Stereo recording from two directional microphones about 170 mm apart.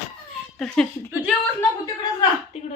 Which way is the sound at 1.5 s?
25° left (ahead or behind).